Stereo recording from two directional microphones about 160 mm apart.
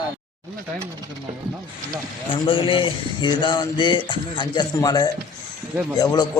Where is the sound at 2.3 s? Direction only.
30° left (ahead or behind).